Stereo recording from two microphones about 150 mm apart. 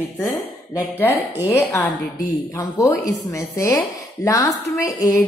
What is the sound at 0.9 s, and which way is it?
A woman's voice, 15° left (ahead or behind).